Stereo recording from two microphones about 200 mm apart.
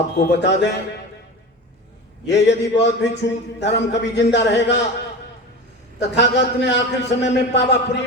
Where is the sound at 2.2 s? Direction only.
60° left (ahead or behind).